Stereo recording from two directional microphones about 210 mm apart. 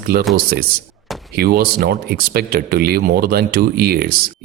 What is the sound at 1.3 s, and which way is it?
Speech, 45° right (ahead or behind).